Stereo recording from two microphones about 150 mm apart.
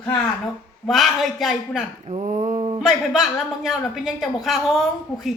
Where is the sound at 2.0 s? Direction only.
45° right (ahead or behind).